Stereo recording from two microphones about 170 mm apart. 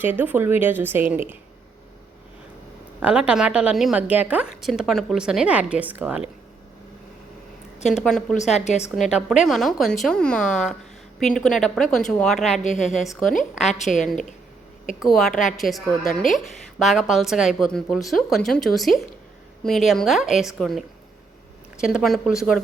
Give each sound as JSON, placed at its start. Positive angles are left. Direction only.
{"t": 0.0, "sound": "a woman's voice", "side_deg": -10}
{"t": 3.0, "sound": "a woman's voice", "side_deg": -5}
{"t": 7.9, "sound": "a woman's voice", "side_deg": 0}
{"t": 8.5, "sound": "a woman's voice", "side_deg": 40}
{"t": 9.0, "sound": "a woman's voice", "side_deg": -5}
{"t": 15.0, "sound": "a woman's voice", "side_deg": 0}